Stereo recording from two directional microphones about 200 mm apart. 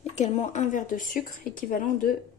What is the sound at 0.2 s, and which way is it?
Speech, 35° left (ahead or behind).